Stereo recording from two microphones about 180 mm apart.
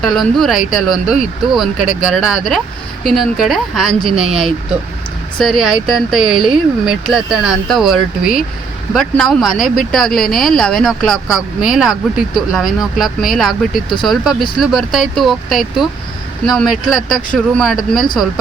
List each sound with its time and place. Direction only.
0.0 s speech: centre (ahead or behind)
4.1 s speech: 35° right (ahead or behind)
5.4 s speech: centre (ahead or behind)